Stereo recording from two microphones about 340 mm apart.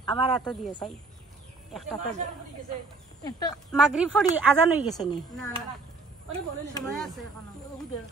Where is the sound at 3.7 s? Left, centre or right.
Centre.